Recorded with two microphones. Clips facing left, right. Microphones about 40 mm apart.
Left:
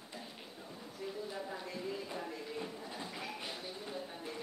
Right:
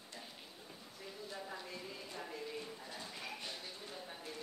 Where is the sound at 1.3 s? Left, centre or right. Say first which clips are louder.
Left 4 dB; centre.